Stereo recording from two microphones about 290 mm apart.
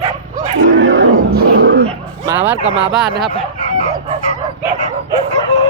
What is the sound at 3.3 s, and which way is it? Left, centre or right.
Chicken, left.